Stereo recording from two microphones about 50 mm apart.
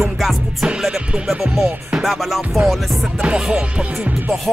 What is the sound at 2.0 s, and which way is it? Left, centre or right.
Speech, centre.